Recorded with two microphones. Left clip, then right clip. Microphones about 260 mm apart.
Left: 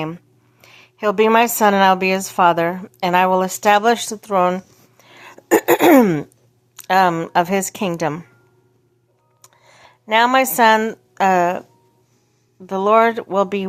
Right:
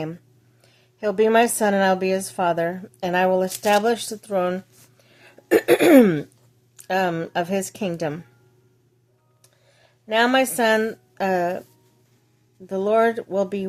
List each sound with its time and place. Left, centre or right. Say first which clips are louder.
0.6 s a woman's voice: left 6 dB; centre
9.4 s a sound: left 11 dB; centre
12.6 s a woman's voice: left 5 dB; centre